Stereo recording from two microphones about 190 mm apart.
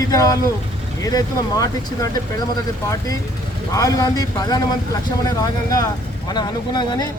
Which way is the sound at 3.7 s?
20° left (ahead or behind).